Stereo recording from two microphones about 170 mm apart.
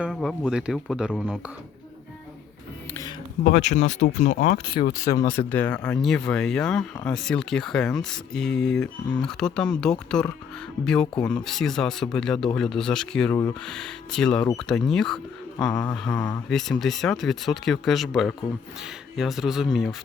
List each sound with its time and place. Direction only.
0.0 s speech: centre (ahead or behind)
3.4 s speech: 45° left (ahead or behind)
4.8 s speech: 35° left (ahead or behind)
5.2 s speech: 10° left (ahead or behind)